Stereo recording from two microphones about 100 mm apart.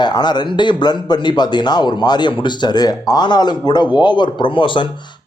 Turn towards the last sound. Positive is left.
turn(degrees=55)  # may be behind; listen again after turning